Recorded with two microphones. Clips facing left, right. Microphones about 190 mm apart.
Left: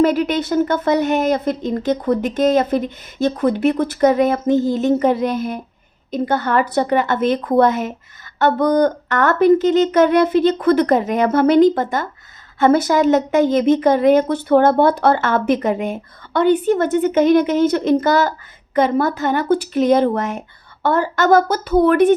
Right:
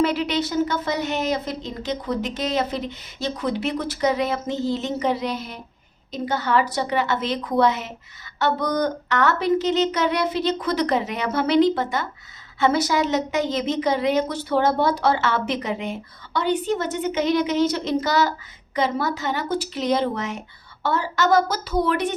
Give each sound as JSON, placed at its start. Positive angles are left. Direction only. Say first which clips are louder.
{"t": 0.0, "sound": "a woman's voice", "louder": "left 6 dB", "side_deg": 45}